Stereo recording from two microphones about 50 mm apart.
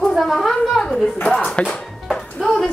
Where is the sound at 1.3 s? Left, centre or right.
Centre.